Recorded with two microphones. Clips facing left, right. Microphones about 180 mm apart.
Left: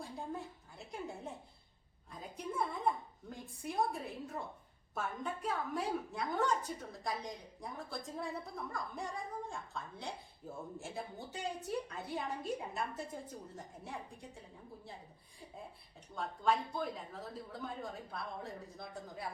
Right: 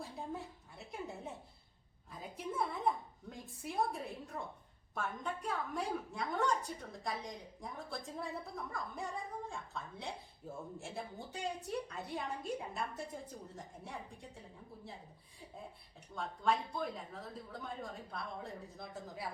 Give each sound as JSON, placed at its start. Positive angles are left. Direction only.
{"t": 0.0, "sound": "a sound", "side_deg": 0}
{"t": 2.0, "sound": "a woman's voice", "side_deg": 0}
{"t": 16.1, "sound": "a woman's voice", "side_deg": 0}